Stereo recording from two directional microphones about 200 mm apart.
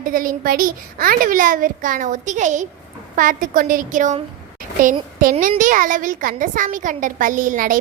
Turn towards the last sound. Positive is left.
turn(degrees=-45)  # may be behind; listen again after turning